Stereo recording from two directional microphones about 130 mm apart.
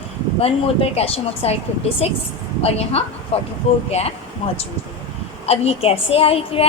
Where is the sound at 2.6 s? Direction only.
50° left (ahead or behind).